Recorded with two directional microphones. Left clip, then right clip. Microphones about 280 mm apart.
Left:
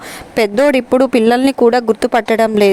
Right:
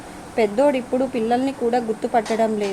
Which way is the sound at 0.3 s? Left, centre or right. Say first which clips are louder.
Left 6 dB; left.